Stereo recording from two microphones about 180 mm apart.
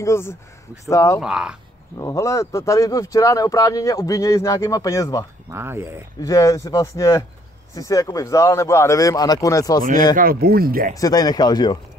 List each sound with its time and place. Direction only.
0.0 s speech: 15° left (ahead or behind)
1.2 s speech: 5° right (ahead or behind)
2.0 s speech: 15° left (ahead or behind)
5.5 s speech: 15° right (ahead or behind)
6.2 s speech: 20° left (ahead or behind)
10.1 s speech: 55° right (ahead or behind)
11.0 s speech: 20° left (ahead or behind)